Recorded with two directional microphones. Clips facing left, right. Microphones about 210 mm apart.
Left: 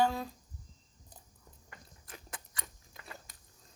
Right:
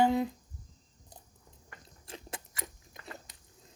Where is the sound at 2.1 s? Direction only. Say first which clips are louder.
Right 6 dB; 25° right (ahead or behind).